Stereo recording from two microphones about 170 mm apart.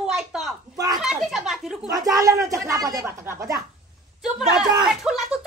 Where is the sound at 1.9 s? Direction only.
20° right (ahead or behind).